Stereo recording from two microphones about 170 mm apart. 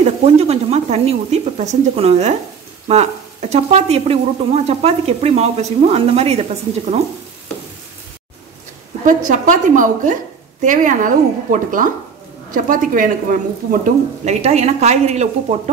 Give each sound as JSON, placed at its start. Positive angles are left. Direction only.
{"t": 0.0, "sound": "speech", "side_deg": -40}
{"t": 9.3, "sound": "speech", "side_deg": -50}
{"t": 14.4, "sound": "speech", "side_deg": -40}